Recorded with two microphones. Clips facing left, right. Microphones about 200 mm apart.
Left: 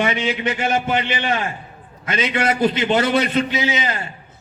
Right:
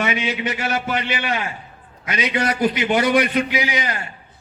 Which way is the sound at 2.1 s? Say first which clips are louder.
Left 1 dB; 25° left (ahead or behind).